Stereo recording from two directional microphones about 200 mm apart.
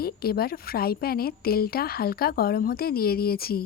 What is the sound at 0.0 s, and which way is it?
A woman's voice, 50° left (ahead or behind).